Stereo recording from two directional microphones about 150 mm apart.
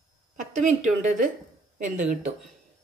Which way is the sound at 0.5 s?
55° right (ahead or behind).